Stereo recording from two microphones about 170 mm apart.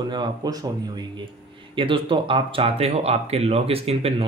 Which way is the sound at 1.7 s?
30° right (ahead or behind).